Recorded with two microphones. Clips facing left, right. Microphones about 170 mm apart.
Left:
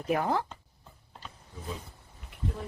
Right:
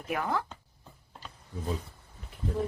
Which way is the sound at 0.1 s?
30° left (ahead or behind).